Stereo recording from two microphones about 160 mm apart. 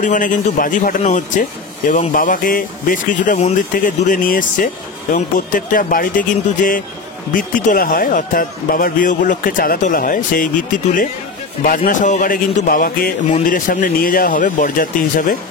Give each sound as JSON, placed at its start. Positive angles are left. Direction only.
{"t": 0.0, "sound": "a man's voice", "side_deg": 55}
{"t": 11.6, "sound": "speech", "side_deg": 60}